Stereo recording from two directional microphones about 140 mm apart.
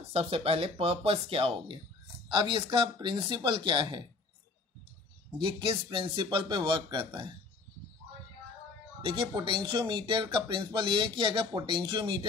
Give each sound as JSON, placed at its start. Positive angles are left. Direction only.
{"t": 0.1, "sound": "speech", "side_deg": -45}
{"t": 5.4, "sound": "speech", "side_deg": -35}
{"t": 9.0, "sound": "speech", "side_deg": -35}